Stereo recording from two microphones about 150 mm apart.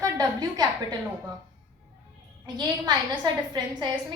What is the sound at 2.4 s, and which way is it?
A woman's voice, 30° right (ahead or behind).